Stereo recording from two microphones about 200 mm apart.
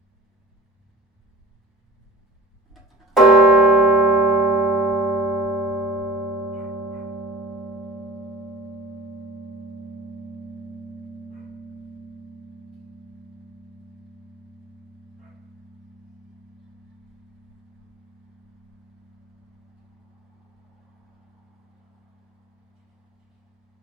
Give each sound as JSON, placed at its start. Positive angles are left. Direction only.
{"t": 3.2, "sound": "church bell", "side_deg": 0}